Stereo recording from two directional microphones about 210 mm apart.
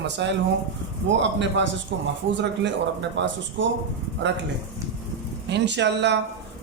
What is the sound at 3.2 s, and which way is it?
Speech, 55° right (ahead or behind).